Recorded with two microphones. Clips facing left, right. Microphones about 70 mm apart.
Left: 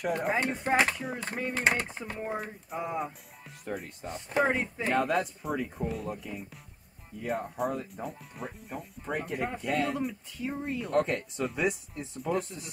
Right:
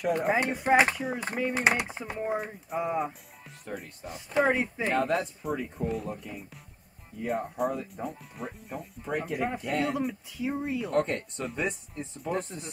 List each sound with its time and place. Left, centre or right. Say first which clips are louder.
0.0 s speech: right 3 dB; centre
1.5 s speech: right 1 dB; centre
4.9 s speech: even; centre
12.4 s speech: even; right